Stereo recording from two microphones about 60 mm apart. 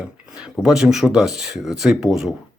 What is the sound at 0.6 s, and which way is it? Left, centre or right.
Speech, centre.